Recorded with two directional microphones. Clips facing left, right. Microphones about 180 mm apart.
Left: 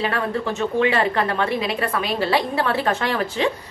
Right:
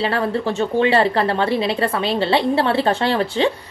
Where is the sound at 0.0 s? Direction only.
30° right (ahead or behind).